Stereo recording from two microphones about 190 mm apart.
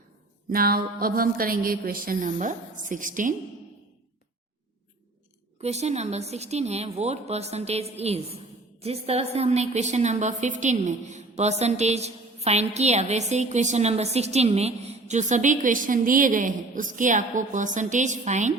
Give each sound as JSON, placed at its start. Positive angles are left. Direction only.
{"t": 0.5, "sound": "speech", "side_deg": -50}
{"t": 5.5, "sound": "a woman's voice", "side_deg": -35}